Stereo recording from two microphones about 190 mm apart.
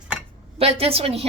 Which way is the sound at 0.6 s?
30° right (ahead or behind).